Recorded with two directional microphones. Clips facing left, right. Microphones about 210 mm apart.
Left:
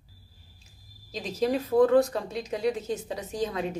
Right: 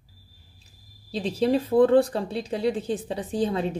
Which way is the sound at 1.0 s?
30° right (ahead or behind).